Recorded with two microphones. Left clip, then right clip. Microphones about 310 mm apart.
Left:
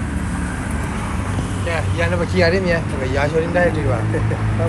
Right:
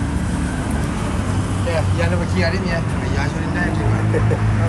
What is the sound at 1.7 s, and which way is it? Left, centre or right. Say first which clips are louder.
Vehicle: left 1 dB; centre.